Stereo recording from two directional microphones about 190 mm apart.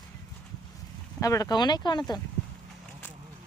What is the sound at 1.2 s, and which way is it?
Speech, 20° left (ahead or behind).